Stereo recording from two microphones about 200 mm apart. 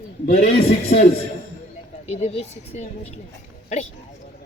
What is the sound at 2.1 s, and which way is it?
Speech, 30° left (ahead or behind).